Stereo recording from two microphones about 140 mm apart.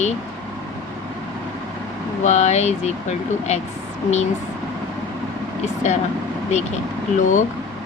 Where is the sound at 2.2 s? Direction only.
55° left (ahead or behind).